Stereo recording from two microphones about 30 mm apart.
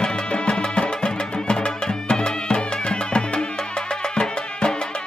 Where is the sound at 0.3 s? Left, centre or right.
Left.